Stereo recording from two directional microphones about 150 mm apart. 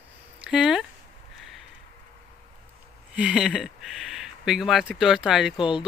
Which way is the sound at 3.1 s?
5° right (ahead or behind).